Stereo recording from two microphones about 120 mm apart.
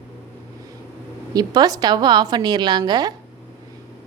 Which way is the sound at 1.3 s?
30° right (ahead or behind).